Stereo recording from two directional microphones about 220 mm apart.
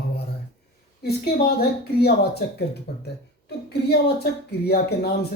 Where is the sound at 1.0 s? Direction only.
45° left (ahead or behind).